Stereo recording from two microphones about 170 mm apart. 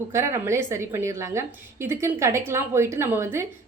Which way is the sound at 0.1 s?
15° right (ahead or behind).